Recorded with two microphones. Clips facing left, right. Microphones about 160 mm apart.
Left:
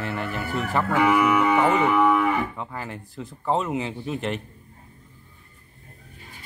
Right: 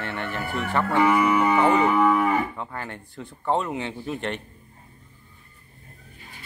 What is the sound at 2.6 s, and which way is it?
Speech, 5° left (ahead or behind).